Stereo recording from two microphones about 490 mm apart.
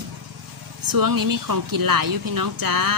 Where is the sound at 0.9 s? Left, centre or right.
Right.